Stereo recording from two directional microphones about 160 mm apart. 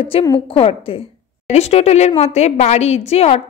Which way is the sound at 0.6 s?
35° left (ahead or behind).